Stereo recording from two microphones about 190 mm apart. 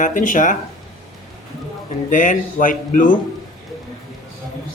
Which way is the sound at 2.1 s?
45° left (ahead or behind).